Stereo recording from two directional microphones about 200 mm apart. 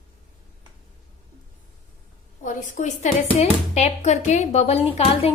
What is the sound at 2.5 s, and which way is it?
A woman's voice, 40° left (ahead or behind).